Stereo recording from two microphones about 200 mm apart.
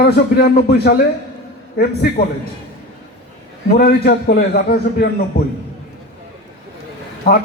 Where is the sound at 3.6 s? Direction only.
55° left (ahead or behind).